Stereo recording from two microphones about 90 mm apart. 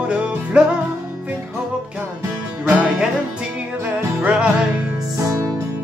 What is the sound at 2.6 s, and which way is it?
Music, 10° right (ahead or behind).